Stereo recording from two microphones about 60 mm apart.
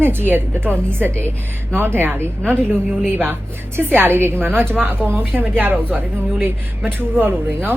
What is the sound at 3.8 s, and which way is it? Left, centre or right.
A woman's voice, right.